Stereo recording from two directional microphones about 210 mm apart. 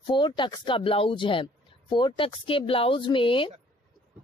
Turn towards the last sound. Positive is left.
turn(degrees=25)  # may be behind; listen again after turning